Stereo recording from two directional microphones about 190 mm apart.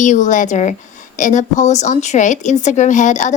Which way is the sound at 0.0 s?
40° left (ahead or behind).